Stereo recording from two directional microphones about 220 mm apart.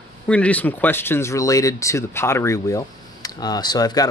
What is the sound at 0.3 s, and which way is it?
Speech, 5° left (ahead or behind).